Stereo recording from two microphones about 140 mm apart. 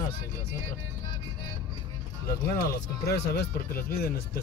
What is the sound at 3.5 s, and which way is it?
Speech, 90° left.